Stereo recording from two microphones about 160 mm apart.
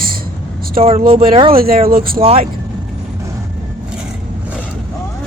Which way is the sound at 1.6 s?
65° right (ahead or behind).